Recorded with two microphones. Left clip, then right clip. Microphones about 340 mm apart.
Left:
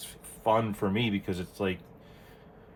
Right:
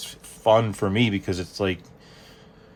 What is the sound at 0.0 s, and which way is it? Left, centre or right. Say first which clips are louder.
Speech: right 7 dB; right.